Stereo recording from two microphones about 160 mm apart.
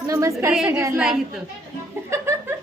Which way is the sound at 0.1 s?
20° right (ahead or behind).